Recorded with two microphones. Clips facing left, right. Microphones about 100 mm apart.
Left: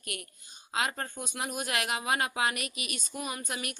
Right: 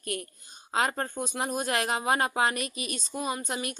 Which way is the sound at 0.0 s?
35° right (ahead or behind).